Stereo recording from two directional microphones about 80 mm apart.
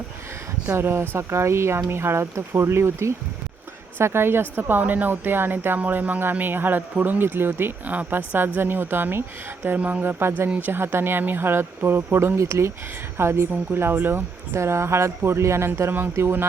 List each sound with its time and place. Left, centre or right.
0.7 s speech: right